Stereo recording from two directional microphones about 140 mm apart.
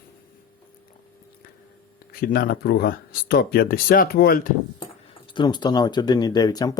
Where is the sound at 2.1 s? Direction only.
90° left.